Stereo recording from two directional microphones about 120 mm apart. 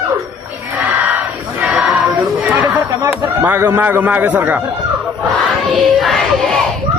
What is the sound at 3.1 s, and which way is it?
A man's voice, 15° right (ahead or behind).